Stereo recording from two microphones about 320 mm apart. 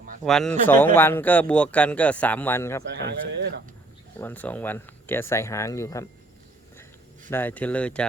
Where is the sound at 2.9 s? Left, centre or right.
Right.